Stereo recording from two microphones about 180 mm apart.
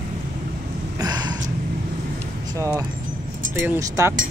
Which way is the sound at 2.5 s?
15° right (ahead or behind).